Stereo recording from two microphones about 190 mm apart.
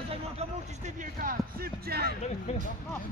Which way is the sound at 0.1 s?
35° right (ahead or behind).